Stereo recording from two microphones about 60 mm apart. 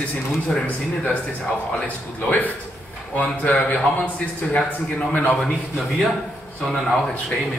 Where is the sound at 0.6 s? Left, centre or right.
Left.